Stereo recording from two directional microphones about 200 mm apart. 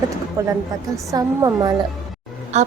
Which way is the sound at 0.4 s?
15° right (ahead or behind).